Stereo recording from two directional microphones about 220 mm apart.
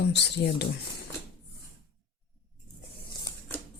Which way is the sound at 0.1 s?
50° left (ahead or behind).